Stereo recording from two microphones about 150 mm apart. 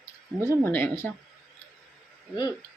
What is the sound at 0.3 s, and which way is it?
Speech, 15° right (ahead or behind).